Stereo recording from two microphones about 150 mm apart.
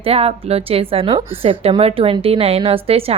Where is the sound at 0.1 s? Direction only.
40° right (ahead or behind).